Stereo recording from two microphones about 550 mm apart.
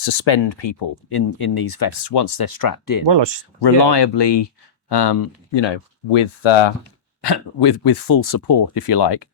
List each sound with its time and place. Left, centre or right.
0.0 s speech: left
2.4 s speech: left
3.1 s speech: right
3.6 s speech: left
6.1 s speech: left
7.2 s speech: left